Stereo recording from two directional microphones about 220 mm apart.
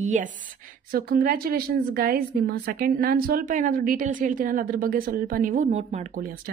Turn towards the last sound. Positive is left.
turn(degrees=-35)  # may be behind; listen again after turning